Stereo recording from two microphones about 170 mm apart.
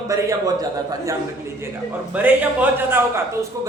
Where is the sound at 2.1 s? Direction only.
10° right (ahead or behind).